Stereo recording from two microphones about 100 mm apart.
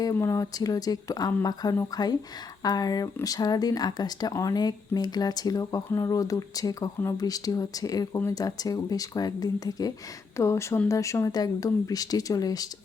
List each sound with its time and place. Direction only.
0.0 s speech: 30° left (ahead or behind)